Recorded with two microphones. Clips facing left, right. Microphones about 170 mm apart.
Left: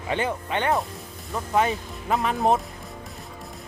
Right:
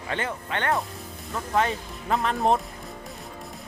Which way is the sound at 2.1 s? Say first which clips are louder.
Left 1 dB; centre (ahead or behind).